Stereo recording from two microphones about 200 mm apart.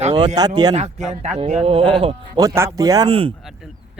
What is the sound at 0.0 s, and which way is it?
Speech, 30° right (ahead or behind).